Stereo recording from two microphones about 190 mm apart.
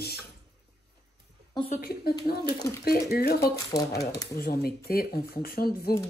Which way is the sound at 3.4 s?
15° left (ahead or behind).